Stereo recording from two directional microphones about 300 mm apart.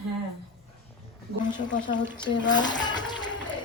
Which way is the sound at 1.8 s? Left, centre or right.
Centre.